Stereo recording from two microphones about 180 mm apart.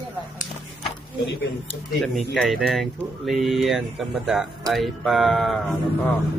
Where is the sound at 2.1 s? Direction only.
Centre (ahead or behind).